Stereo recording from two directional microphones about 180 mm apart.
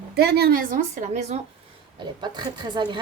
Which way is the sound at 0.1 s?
60° right (ahead or behind).